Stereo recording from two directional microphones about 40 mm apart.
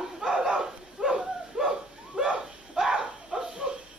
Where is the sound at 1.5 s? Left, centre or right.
Centre.